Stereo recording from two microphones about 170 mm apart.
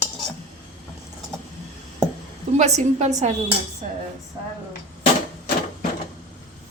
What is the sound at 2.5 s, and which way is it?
Speech, 40° right (ahead or behind).